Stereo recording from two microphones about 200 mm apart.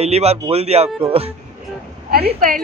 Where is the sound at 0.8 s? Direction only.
10° right (ahead or behind).